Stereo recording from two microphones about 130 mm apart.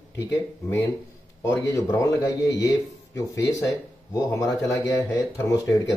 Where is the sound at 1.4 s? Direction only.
25° left (ahead or behind).